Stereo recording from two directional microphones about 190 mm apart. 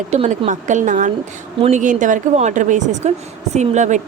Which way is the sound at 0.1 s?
40° right (ahead or behind).